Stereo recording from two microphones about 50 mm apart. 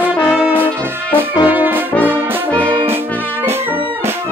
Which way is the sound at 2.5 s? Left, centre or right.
Left.